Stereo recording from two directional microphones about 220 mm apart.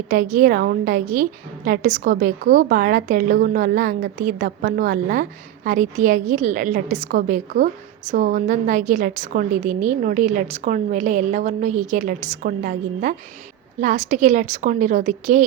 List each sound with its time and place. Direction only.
0.1 s a woman's voice: 40° right (ahead or behind)